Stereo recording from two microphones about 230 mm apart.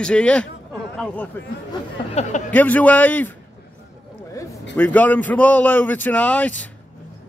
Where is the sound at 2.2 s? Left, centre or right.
Left.